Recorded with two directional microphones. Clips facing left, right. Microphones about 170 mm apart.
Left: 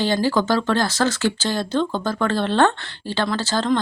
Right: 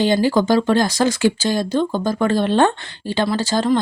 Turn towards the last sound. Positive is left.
turn(degrees=-15)  # may be behind; listen again after turning